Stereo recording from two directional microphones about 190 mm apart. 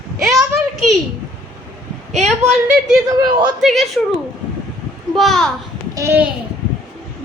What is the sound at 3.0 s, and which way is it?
Speech, 20° right (ahead or behind).